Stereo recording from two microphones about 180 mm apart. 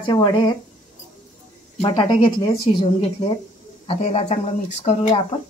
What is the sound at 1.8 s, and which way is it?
Speech, 25° left (ahead or behind).